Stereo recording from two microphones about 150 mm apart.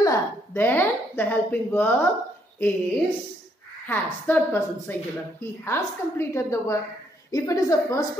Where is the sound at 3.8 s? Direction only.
15° left (ahead or behind).